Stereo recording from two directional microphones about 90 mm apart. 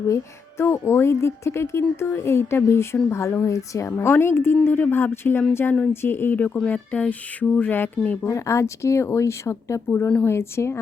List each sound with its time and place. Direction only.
0.6 s speech: 30° left (ahead or behind)
6.7 s music: 15° left (ahead or behind)
8.2 s speech: 35° left (ahead or behind)